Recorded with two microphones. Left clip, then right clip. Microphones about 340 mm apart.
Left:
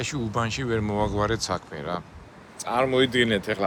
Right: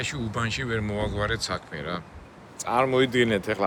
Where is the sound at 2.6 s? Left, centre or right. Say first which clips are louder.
Even; centre.